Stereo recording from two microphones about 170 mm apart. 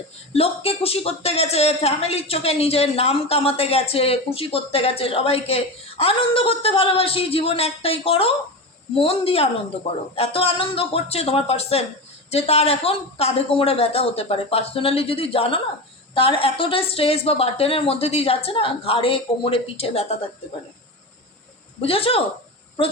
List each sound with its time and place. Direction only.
0.3 s speech: 35° left (ahead or behind)
21.8 s speech: 35° left (ahead or behind)